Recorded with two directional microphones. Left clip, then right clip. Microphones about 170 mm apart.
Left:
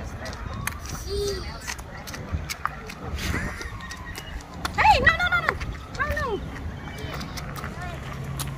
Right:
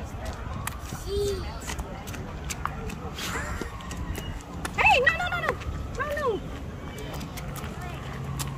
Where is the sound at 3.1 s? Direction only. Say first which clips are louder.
Left 2 dB; 35° right (ahead or behind).